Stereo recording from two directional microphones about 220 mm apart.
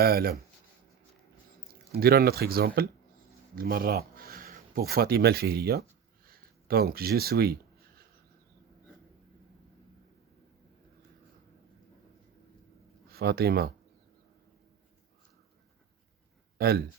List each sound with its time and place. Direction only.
0.0 s speech: 45° right (ahead or behind)
1.9 s speech: 45° right (ahead or behind)
6.2 s a sound: 45° right (ahead or behind)
13.1 s speech: 45° right (ahead or behind)
16.6 s speech: 45° right (ahead or behind)